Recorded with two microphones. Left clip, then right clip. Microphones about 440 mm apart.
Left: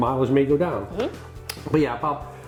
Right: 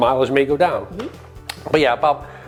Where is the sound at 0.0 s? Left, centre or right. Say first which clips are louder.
Right 5 dB; right.